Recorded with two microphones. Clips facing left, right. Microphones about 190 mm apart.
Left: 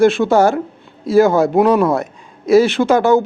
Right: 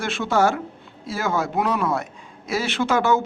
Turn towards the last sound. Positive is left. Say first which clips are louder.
# left 8 dB
turn(degrees=40)  # may be behind; listen again after turning